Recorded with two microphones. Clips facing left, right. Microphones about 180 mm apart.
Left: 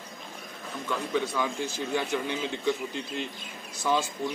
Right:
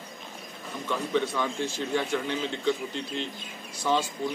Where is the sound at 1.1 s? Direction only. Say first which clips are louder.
Right 1 dB; 5° left (ahead or behind).